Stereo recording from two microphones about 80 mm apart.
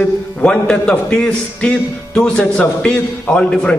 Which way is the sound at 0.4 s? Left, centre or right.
Centre.